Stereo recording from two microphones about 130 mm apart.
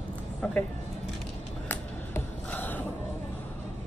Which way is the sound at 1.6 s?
15° left (ahead or behind).